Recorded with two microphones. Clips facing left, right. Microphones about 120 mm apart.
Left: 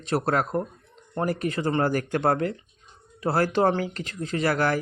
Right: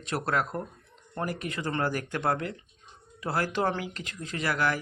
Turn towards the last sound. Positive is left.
turn(degrees=40)  # may be behind; listen again after turning